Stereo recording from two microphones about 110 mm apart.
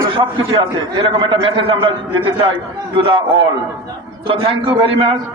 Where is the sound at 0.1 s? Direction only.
55° right (ahead or behind).